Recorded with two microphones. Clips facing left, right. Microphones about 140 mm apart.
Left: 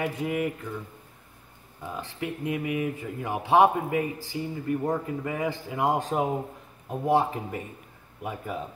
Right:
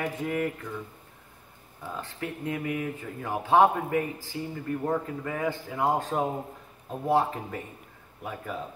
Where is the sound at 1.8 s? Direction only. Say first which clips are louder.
Left 2 dB; 15° left (ahead or behind).